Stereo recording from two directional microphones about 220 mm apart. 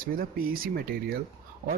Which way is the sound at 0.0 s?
40° right (ahead or behind).